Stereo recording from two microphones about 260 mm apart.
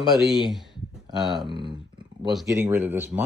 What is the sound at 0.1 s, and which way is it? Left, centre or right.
Speech, centre.